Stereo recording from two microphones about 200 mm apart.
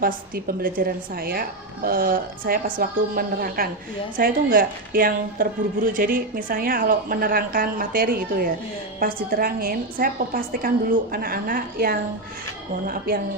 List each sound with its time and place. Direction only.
0.0 s a woman's voice: 45° right (ahead or behind)